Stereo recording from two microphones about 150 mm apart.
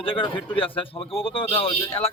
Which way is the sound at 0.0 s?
35° left (ahead or behind).